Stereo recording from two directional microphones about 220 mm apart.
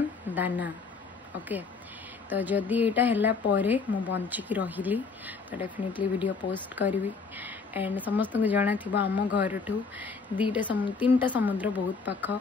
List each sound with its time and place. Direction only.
0.3 s speech: 10° right (ahead or behind)
2.2 s speech: 5° right (ahead or behind)